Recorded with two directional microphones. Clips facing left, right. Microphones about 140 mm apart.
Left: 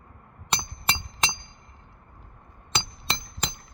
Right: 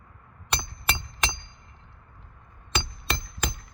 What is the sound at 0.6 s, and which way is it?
Hammer, 20° left (ahead or behind).